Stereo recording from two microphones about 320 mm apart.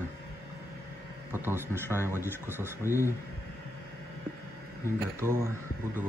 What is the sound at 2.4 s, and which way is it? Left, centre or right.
Speech, centre.